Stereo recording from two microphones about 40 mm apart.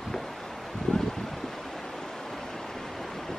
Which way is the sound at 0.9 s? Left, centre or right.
Centre.